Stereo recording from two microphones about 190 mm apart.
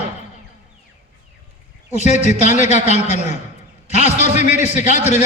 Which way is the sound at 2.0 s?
35° left (ahead or behind).